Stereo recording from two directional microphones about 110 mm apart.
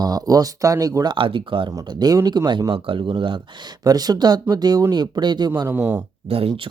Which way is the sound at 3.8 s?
35° right (ahead or behind).